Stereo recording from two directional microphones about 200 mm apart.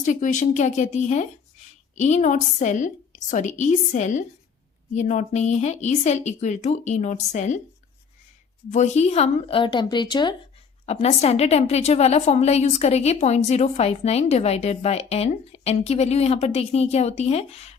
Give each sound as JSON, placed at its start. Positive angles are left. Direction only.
{"t": 0.0, "sound": "a woman's voice", "side_deg": 40}
{"t": 8.7, "sound": "a woman's voice", "side_deg": 35}
{"t": 10.8, "sound": "a woman's voice", "side_deg": 30}